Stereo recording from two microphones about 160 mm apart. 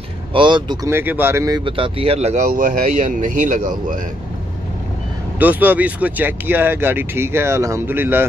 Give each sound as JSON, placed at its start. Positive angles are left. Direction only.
{"t": 0.3, "sound": "speech", "side_deg": -30}
{"t": 0.8, "sound": "speech", "side_deg": -15}
{"t": 1.6, "sound": "speech", "side_deg": -35}
{"t": 5.4, "sound": "speech", "side_deg": -10}